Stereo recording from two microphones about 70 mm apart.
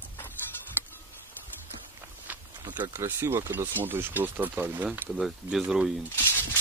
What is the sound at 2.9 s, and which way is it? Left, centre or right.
Speech, right.